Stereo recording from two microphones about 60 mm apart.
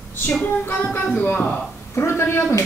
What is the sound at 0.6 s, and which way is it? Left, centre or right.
Speech, left.